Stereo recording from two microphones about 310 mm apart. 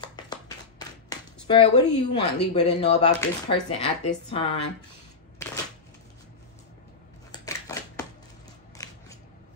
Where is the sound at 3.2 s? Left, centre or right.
Centre.